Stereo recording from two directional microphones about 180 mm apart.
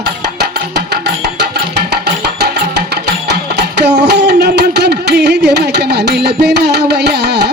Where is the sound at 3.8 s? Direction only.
70° right (ahead or behind).